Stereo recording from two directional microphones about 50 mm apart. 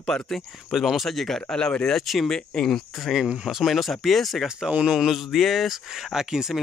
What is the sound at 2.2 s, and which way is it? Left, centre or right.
Speech, centre.